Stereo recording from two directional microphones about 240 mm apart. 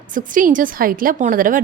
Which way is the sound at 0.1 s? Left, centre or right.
Right.